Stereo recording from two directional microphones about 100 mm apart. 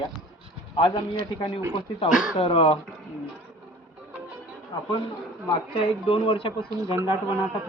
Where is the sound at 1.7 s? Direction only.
65° left (ahead or behind).